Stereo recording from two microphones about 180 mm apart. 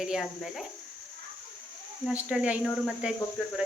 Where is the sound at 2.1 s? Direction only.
5° right (ahead or behind).